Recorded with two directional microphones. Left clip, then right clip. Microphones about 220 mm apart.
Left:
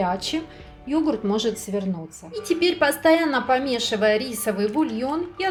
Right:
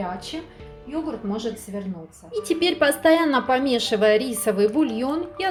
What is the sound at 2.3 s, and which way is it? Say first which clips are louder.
Speech: even; 10° right (ahead or behind).